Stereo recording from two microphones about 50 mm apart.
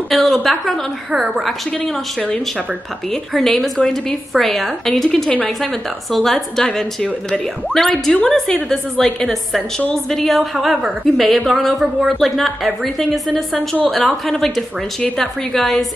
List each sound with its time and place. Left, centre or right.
0.1 s a woman's voice: centre
2.1 s speech: centre
3.1 s a woman's voice: centre